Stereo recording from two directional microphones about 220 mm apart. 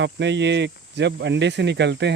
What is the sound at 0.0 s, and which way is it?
Speech, 55° right (ahead or behind).